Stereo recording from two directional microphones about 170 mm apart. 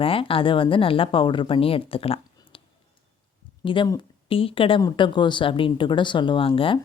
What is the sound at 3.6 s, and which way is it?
Speech, 30° left (ahead or behind).